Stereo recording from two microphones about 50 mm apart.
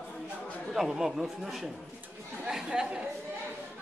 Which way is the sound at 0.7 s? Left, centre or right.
Centre.